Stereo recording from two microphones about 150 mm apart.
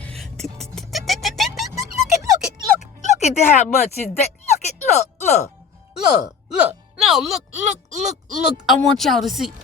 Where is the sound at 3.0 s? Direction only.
50° left (ahead or behind).